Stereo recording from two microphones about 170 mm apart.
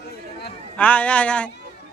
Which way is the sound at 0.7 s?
10° left (ahead or behind).